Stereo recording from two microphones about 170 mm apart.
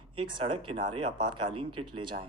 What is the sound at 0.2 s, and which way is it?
Speech, 30° right (ahead or behind).